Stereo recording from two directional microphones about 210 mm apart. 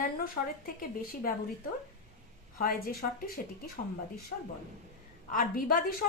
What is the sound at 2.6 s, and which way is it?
Speech, 45° left (ahead or behind).